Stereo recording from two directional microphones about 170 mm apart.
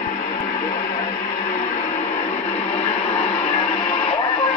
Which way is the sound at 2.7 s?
35° left (ahead or behind).